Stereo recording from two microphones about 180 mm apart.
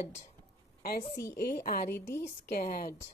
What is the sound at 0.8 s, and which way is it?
A woman's voice, 55° left (ahead or behind).